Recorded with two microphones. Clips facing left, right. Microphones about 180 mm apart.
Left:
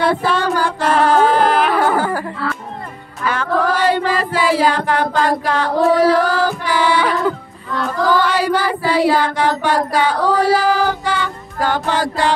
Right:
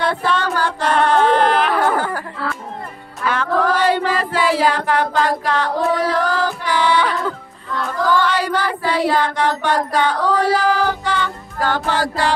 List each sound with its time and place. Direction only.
0.0 s female singing: 5° left (ahead or behind)
3.3 s choir: centre (ahead or behind)
8.0 s child singing: 10° left (ahead or behind)